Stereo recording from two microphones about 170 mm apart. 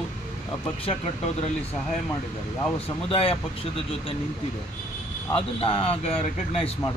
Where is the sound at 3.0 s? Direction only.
35° left (ahead or behind).